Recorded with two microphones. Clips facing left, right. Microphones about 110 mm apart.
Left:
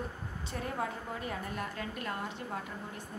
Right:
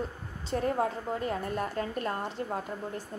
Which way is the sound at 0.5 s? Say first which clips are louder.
Right 8 dB; 40° right (ahead or behind).